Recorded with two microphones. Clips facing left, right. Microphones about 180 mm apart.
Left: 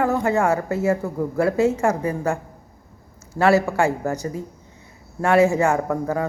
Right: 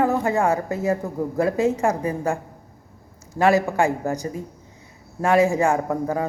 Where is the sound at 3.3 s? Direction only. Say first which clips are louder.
Left 1 dB; 15° right (ahead or behind).